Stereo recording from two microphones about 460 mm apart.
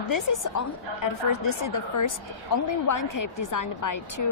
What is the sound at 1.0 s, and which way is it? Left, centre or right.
A woman's voice, left.